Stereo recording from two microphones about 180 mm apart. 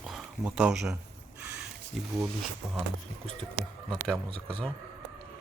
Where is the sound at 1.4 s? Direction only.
5° right (ahead or behind).